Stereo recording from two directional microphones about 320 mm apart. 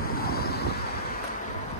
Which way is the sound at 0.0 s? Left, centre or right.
Left.